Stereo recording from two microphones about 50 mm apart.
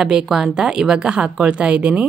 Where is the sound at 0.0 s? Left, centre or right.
Centre.